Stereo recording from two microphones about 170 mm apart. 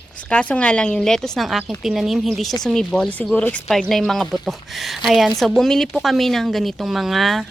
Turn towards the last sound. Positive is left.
turn(degrees=0)  # may be behind; listen again after turning